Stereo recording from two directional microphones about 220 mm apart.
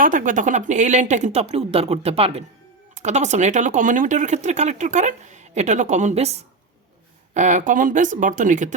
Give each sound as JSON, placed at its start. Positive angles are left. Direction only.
{"t": 0.0, "sound": "speech", "side_deg": -35}
{"t": 7.3, "sound": "speech", "side_deg": -35}